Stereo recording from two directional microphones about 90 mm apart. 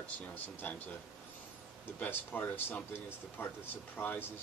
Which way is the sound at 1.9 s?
20° left (ahead or behind).